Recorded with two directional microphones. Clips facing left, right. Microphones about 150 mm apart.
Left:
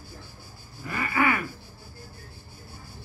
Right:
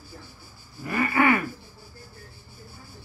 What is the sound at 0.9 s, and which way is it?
Wheeze, 25° right (ahead or behind).